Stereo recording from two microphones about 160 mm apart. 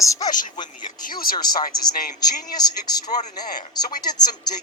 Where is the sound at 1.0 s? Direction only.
65° left (ahead or behind).